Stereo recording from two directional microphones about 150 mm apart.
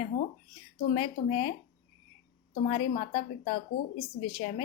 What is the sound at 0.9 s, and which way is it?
Speech, 35° left (ahead or behind).